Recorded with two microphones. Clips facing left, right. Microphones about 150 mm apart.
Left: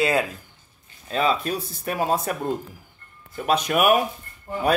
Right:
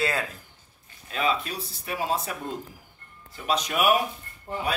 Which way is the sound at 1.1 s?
35° left (ahead or behind).